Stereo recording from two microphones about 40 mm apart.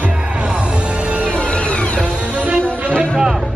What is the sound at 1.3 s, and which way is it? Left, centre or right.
Music, left.